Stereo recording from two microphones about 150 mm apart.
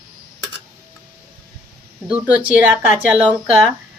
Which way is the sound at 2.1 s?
10° right (ahead or behind).